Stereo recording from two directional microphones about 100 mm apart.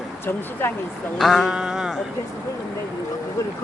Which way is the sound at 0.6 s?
25° left (ahead or behind).